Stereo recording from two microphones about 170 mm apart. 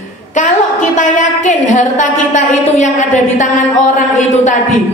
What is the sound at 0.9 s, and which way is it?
A woman's voice, 50° left (ahead or behind).